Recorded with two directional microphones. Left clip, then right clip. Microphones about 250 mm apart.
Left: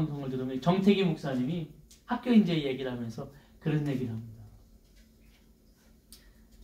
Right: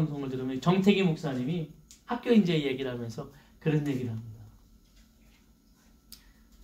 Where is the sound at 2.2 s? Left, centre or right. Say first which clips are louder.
Right 2 dB; right.